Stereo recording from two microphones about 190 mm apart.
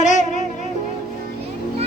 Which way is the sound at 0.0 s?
40° left (ahead or behind).